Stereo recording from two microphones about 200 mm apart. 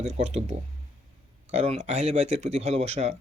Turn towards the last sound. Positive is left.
turn(degrees=-30)  # may be behind; listen again after turning